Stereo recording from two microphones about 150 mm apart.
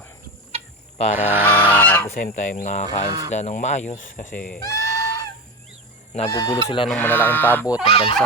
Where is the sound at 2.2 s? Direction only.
70° left (ahead or behind); by 3.1 s 50° left (ahead or behind).